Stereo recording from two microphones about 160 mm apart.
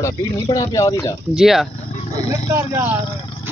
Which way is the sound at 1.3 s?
Centre (ahead or behind).